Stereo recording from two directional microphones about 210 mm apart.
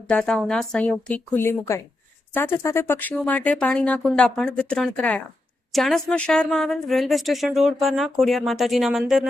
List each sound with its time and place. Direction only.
0.1 s a woman's voice: 5° left (ahead or behind)